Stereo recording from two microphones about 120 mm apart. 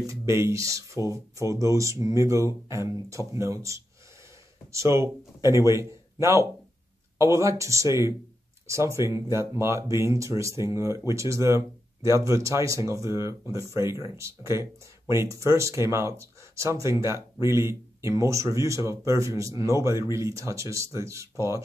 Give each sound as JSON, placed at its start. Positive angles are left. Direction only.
{"t": 0.3, "sound": "speech", "side_deg": -25}